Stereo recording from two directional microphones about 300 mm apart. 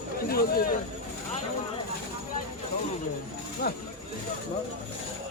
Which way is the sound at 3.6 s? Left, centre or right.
Left.